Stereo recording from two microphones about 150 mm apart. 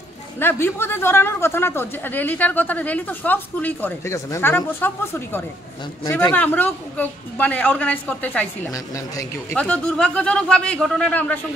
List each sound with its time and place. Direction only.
0.4 s a man's voice: 15° left (ahead or behind)
8.7 s a man's voice: 20° left (ahead or behind)
9.6 s a man's voice: 5° left (ahead or behind)